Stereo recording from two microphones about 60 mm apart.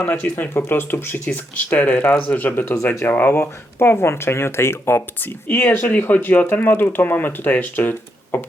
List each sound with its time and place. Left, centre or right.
0.3 s speech: left
1.3 s speech: left
2.9 s speech: left
3.2 s speech: left
3.4 s speech: left